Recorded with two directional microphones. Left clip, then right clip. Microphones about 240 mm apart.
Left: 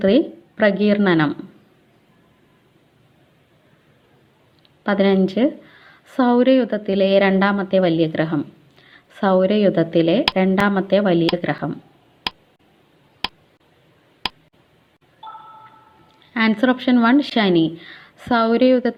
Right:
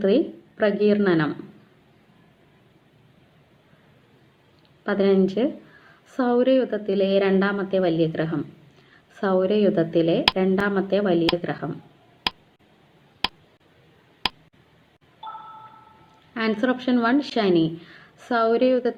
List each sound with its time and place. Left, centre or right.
0.0 s speech: left
4.8 s speech: left
12.3 s tick: centre
13.2 s a sound: centre
14.2 s tick: centre
15.2 s a sound: centre
16.3 s speech: left